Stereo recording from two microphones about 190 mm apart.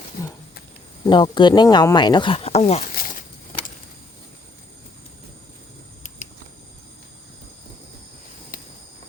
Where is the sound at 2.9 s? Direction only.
50° left (ahead or behind).